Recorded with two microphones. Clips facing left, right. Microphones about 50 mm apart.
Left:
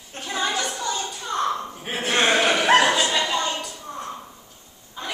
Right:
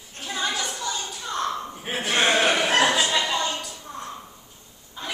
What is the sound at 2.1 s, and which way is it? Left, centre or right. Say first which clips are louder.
Chuckle: left 1 dB; centre.